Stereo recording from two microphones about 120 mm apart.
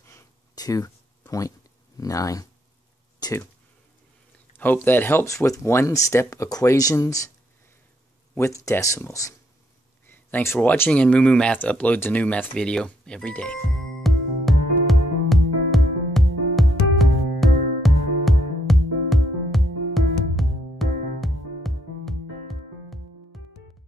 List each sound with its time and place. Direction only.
0.1 s a sound: 30° left (ahead or behind)
2.0 s speech: 30° left (ahead or behind)
4.6 s speech: 15° left (ahead or behind)
8.4 s speech: 25° left (ahead or behind)
14.0 s music: centre (ahead or behind)